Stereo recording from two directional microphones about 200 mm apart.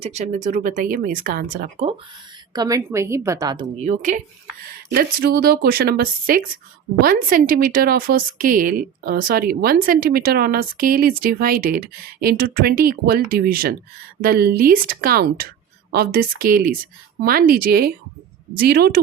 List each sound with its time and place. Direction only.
0.0 s speech: 35° right (ahead or behind)
2.5 s a woman's voice: 20° right (ahead or behind)
3.8 s speech: 35° right (ahead or behind)
4.9 s a woman's voice: 50° right (ahead or behind)